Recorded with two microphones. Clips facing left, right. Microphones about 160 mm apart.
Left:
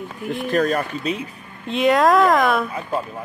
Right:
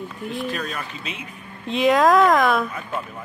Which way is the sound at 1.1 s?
35° left (ahead or behind).